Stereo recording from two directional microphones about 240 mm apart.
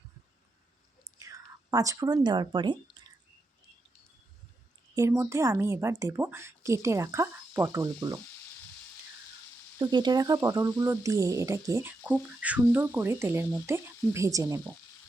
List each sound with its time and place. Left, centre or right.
1.0 s speech: centre
4.9 s speech: centre
9.7 s speech: centre